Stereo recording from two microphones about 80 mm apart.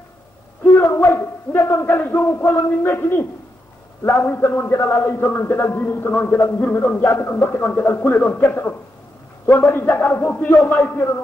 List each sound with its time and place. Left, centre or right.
0.7 s a man's voice: left; by 10.9 s centre
10.9 s a man's voice: left